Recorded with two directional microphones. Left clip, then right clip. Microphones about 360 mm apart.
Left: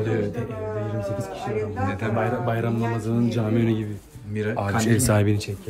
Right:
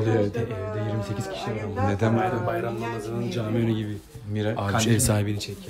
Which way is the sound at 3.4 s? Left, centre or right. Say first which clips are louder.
Left 3 dB; centre.